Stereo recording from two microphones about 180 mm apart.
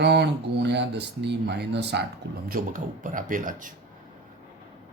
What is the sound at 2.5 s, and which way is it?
A man's voice, 50° right (ahead or behind).